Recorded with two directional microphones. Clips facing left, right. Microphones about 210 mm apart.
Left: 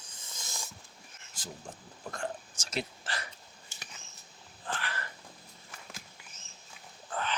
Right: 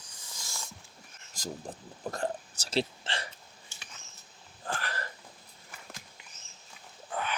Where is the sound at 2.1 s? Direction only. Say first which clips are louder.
Right 4 dB; 35° right (ahead or behind).